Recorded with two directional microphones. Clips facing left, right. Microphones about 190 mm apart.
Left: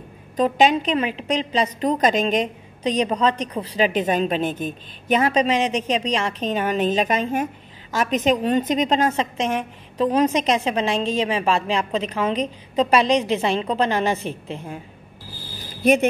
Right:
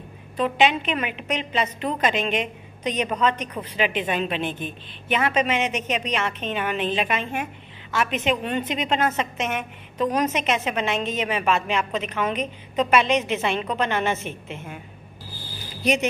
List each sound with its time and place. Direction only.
0.4 s a woman's voice: 40° left (ahead or behind)
15.8 s speech: 55° left (ahead or behind)